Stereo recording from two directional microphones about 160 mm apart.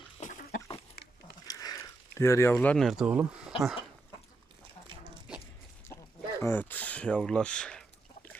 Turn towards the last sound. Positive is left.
turn(degrees=5)  # may be behind; listen again after turning